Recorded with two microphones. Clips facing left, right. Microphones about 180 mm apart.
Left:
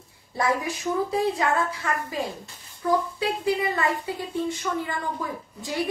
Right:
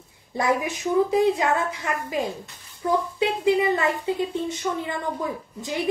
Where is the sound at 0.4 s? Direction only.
20° right (ahead or behind).